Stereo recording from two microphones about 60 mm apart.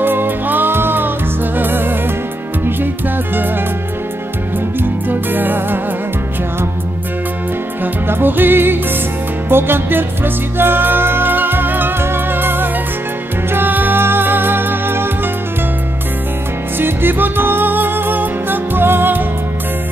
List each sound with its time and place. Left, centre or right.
0.0 s music: right
5.1 s music: right
7.8 s music: right
16.7 s music: right